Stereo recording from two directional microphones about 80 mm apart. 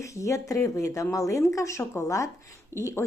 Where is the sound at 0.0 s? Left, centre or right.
Left.